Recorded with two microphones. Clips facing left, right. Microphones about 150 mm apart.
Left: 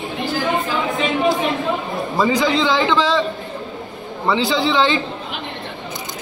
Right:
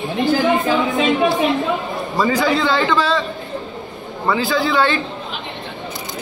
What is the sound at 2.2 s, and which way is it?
A man's voice, 15° left (ahead or behind).